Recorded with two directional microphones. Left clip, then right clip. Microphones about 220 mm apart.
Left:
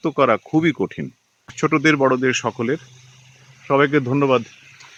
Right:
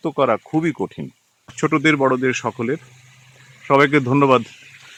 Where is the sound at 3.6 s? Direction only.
15° right (ahead or behind).